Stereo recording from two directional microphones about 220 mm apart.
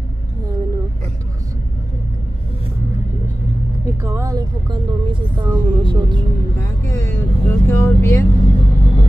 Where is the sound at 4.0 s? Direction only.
15° right (ahead or behind).